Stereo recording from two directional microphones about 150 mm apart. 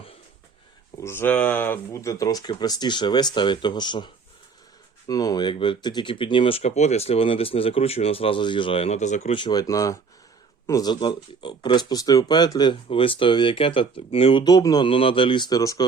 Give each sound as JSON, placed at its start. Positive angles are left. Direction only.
{"t": 1.0, "sound": "speech", "side_deg": 15}
{"t": 9.3, "sound": "speech", "side_deg": 30}
{"t": 14.4, "sound": "speech", "side_deg": 25}